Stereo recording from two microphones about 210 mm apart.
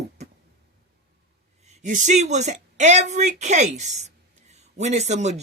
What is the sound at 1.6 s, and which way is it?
Speech, 35° right (ahead or behind).